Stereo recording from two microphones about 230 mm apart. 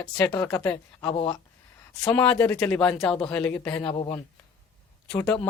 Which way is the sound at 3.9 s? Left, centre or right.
Left.